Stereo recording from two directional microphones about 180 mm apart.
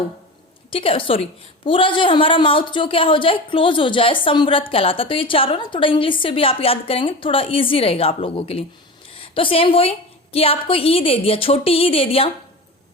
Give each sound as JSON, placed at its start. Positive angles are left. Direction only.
{"t": 0.7, "sound": "a woman's voice", "side_deg": 30}